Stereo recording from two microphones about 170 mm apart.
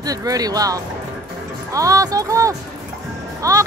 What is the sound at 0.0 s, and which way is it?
Speech, 20° right (ahead or behind).